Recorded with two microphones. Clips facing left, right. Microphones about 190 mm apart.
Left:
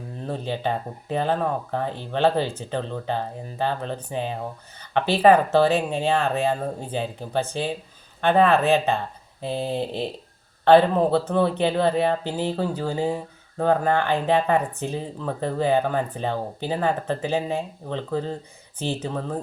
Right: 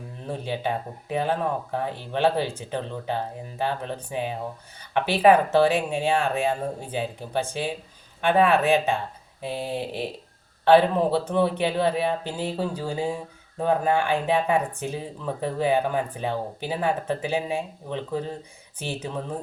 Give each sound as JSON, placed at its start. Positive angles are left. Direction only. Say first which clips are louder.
{"t": 0.3, "sound": "speech", "louder": "left 1 dB", "side_deg": -10}